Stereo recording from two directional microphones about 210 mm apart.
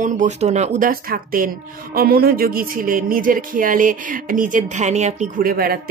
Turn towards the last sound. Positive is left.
turn(degrees=-45)  # may be behind; listen again after turning